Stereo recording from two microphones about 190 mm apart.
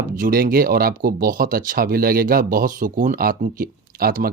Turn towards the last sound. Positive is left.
turn(degrees=-50)  # may be behind; listen again after turning